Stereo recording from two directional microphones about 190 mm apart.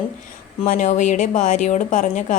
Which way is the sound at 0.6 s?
45° left (ahead or behind).